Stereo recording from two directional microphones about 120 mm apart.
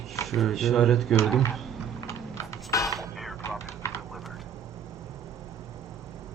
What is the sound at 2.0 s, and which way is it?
Music, 25° left (ahead or behind).